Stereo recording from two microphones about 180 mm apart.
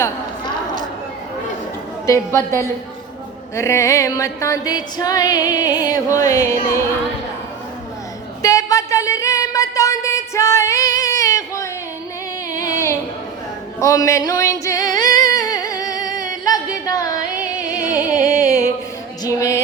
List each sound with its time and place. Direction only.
2.0 s a woman's voice: 15° left (ahead or behind)
3.5 s music: 15° left (ahead or behind)
8.4 s a sound: 20° left (ahead or behind)
13.7 s singing: 15° left (ahead or behind)
16.4 s music: 20° left (ahead or behind)
18.3 s music: 20° left (ahead or behind)